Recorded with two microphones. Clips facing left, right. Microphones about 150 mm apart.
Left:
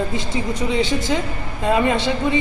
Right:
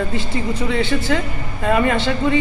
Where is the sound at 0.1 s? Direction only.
15° left (ahead or behind).